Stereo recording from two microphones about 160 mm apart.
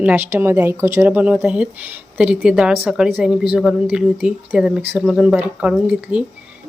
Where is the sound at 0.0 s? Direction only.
10° right (ahead or behind).